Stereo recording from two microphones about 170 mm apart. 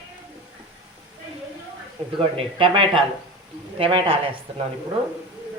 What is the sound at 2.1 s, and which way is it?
Speech, 30° right (ahead or behind).